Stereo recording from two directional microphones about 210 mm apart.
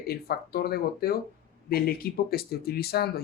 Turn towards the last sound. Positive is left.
turn(degrees=50)  # may be behind; listen again after turning